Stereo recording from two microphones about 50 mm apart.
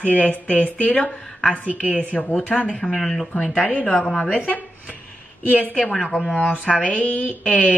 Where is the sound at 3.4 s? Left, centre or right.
Left.